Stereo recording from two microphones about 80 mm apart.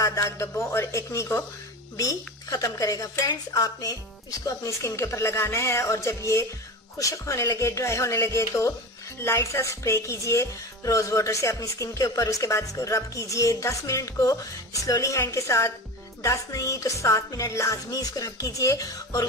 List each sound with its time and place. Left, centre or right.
0.0 s music: left
2.0 s speech: left
4.5 s music: left
16.2 s speech: left